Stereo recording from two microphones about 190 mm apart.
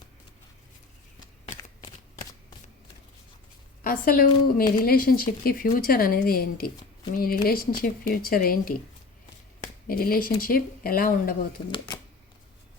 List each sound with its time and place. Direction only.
1.8 s shuffling cards: 25° left (ahead or behind)
3.8 s speech: 50° left (ahead or behind)
9.8 s speech: 50° left (ahead or behind)